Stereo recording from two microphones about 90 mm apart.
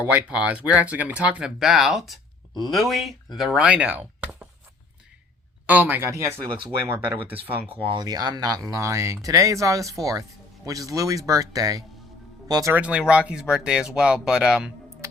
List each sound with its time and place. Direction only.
0.0 s speech: 15° right (ahead or behind)
5.6 s speech: 20° right (ahead or behind)
6.0 s speech: 30° right (ahead or behind)
7.7 s speech: 85° right
8.0 s speech: 50° right (ahead or behind)
12.7 s speech: 15° right (ahead or behind)